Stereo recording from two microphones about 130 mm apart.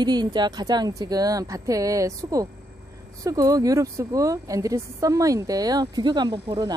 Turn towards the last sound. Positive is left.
turn(degrees=-35)  # may be behind; listen again after turning